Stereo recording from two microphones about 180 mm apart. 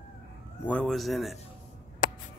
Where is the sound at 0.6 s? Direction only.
5° left (ahead or behind).